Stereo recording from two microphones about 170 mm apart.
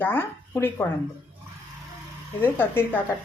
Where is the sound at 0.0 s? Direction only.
10° left (ahead or behind).